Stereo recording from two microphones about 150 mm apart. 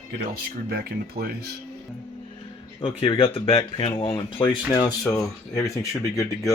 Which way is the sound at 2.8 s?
35° left (ahead or behind).